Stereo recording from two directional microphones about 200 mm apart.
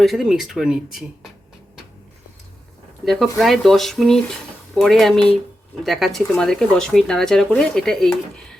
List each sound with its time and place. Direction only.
0.0 s speech: centre (ahead or behind)
3.0 s speech: centre (ahead or behind)